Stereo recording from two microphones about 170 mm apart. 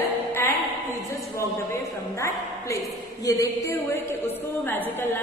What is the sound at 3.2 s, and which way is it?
A woman's voice, 20° left (ahead or behind).